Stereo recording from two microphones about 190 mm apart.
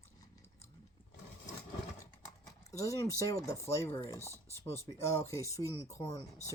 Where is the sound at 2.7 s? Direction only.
15° left (ahead or behind).